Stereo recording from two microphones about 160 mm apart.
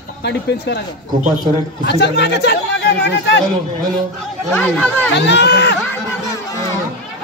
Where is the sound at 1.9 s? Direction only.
90° left.